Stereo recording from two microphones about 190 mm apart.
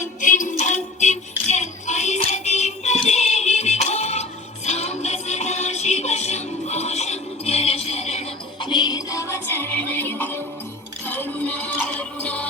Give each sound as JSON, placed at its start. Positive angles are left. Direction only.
{"t": 0.0, "sound": "music", "side_deg": 40}
{"t": 8.6, "sound": "music", "side_deg": 20}